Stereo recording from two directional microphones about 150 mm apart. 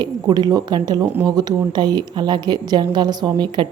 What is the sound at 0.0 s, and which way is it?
Speech, 30° right (ahead or behind).